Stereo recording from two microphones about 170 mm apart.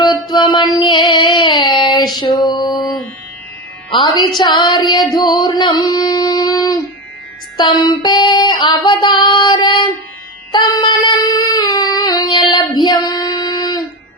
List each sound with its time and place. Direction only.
0.0 s music: 25° left (ahead or behind)
2.1 s mantra: 25° left (ahead or behind)
3.9 s female singing: 30° left (ahead or behind)
4.4 s music: 25° left (ahead or behind)
7.5 s female singing: 25° left (ahead or behind)